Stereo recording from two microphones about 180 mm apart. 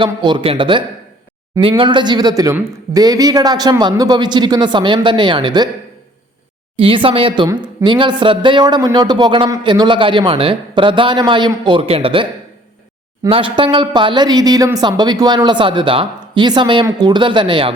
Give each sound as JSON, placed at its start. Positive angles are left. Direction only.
{"t": 0.0, "sound": "speech", "side_deg": -25}
{"t": 6.7, "sound": "speech", "side_deg": -30}